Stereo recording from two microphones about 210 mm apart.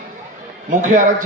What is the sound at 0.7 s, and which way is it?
Speech, 40° right (ahead or behind).